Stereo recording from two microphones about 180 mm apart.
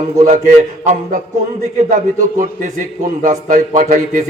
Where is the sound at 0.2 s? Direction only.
45° right (ahead or behind).